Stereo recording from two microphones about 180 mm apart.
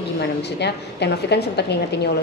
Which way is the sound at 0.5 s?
70° left (ahead or behind).